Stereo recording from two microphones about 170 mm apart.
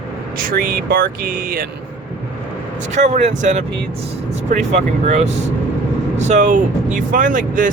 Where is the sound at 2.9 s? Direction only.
45° right (ahead or behind).